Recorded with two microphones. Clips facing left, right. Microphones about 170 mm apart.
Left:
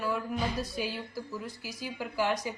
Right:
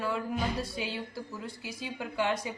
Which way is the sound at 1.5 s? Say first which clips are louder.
Even; 25° right (ahead or behind).